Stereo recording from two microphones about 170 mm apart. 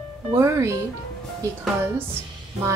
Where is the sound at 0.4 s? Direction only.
15° right (ahead or behind).